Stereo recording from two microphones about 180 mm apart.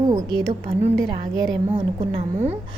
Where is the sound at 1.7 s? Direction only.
35° right (ahead or behind).